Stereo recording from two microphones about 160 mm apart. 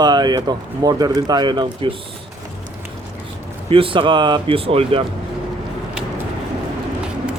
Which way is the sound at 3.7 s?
35° right (ahead or behind).